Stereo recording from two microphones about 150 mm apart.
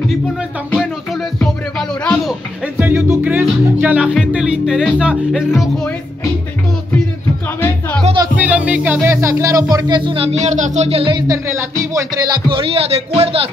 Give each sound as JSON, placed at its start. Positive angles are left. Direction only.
{"t": 0.7, "sound": "music", "side_deg": 0}
{"t": 2.6, "sound": "music", "side_deg": -10}
{"t": 8.4, "sound": "music", "side_deg": -10}
{"t": 11.2, "sound": "speech", "side_deg": -20}